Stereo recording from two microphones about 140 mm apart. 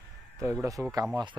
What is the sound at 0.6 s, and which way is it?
Speech, 25° right (ahead or behind).